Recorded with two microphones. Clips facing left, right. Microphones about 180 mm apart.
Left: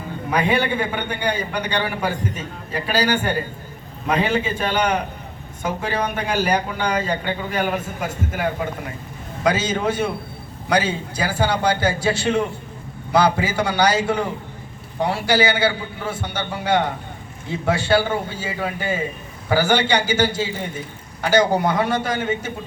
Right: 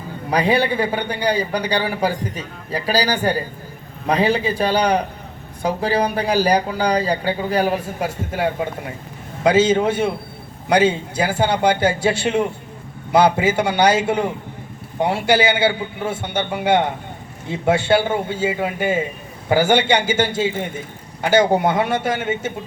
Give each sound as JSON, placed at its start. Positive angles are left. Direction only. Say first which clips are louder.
{"t": 0.3, "sound": "a man's voice", "louder": "right 2 dB", "side_deg": -35}